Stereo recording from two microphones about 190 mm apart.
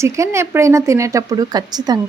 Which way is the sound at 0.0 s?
15° right (ahead or behind).